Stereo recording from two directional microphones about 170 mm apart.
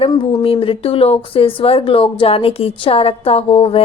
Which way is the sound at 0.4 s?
35° left (ahead or behind).